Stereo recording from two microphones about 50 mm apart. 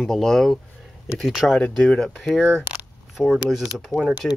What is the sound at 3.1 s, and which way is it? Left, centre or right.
Speech, centre.